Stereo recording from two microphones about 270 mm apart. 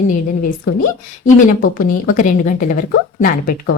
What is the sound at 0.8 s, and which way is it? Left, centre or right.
A woman's voice, left.